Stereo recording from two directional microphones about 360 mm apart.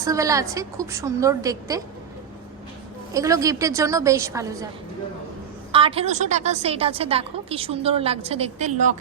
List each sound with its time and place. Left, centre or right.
0.0 s a woman's voice: centre
3.1 s a woman's voice: centre
5.7 s a woman's voice: centre